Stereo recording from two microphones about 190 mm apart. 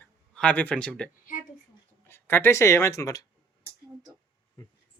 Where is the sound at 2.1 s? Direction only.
10° left (ahead or behind).